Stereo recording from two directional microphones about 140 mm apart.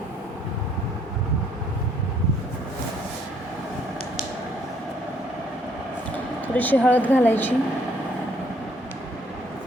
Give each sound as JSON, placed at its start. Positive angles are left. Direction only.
{"t": 6.5, "sound": "speech", "side_deg": 10}